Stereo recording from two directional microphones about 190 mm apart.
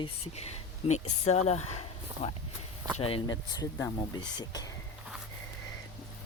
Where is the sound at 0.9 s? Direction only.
35° left (ahead or behind); by 4.6 s 20° left (ahead or behind).